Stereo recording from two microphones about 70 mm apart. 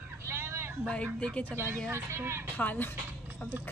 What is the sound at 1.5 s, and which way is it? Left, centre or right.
Speech, right.